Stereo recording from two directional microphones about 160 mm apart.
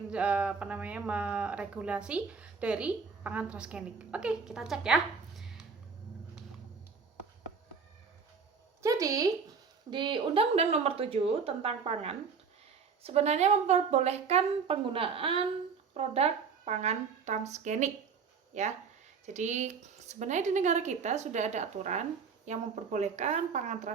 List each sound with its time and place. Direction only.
0.1 s speech: 10° right (ahead or behind)
8.8 s a sound: 20° right (ahead or behind)
9.9 s a woman's voice: 30° right (ahead or behind); by 23.9 s 45° right (ahead or behind)